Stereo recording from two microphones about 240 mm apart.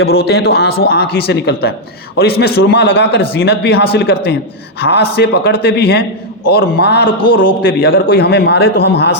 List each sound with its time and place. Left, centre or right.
0.3 s a man's voice: left